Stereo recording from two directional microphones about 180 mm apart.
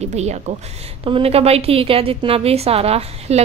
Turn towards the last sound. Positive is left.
turn(degrees=-35)  # may be behind; listen again after turning